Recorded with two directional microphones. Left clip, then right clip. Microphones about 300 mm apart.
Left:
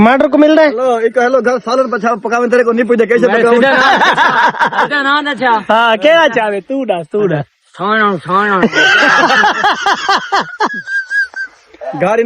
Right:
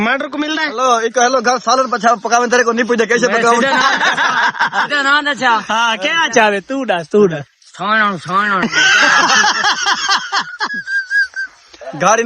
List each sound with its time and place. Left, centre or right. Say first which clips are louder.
0.1 s speech: left 9 dB; centre
0.8 s a man's voice: left 1 dB; centre
3.6 s speech: left 4 dB; centre
6.3 s speech: right 2 dB; right
6.7 s a man's voice: left 1 dB; centre
9.4 s a sound: left 3 dB; centre
11.9 s a man's voice: even; centre